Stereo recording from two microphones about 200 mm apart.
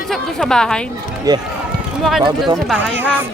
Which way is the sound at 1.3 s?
20° right (ahead or behind).